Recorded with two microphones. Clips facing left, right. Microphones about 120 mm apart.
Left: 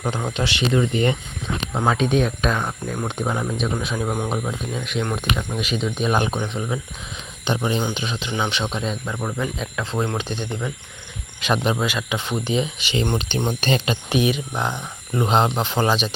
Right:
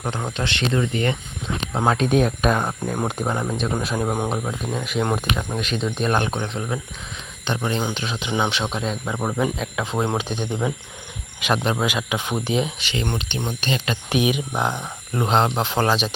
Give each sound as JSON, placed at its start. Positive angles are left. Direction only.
{"t": 0.0, "sound": "speech", "side_deg": 5}
{"t": 1.9, "sound": "speech", "side_deg": 0}
{"t": 2.8, "sound": "speech", "side_deg": -15}
{"t": 3.1, "sound": "speech", "side_deg": 0}
{"t": 3.9, "sound": "speech", "side_deg": -15}
{"t": 4.3, "sound": "speech", "side_deg": 0}
{"t": 5.5, "sound": "speech", "side_deg": 5}
{"t": 7.9, "sound": "speech", "side_deg": 0}
{"t": 9.1, "sound": "speech", "side_deg": -20}
{"t": 9.6, "sound": "speech", "side_deg": -10}
{"t": 11.5, "sound": "speech", "side_deg": 5}
{"t": 11.8, "sound": "speech", "side_deg": -10}
{"t": 13.1, "sound": "speech", "side_deg": 35}
{"t": 14.1, "sound": "speech", "side_deg": -10}